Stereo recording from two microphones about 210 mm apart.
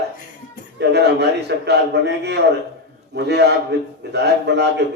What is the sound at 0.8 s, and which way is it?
A man's voice, 55° right (ahead or behind).